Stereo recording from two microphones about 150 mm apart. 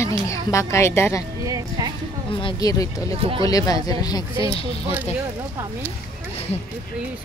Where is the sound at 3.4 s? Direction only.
25° left (ahead or behind).